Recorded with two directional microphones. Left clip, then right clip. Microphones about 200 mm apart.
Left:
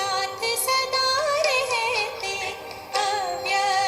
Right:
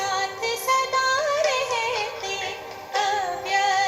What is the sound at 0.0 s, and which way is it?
Music, 15° left (ahead or behind).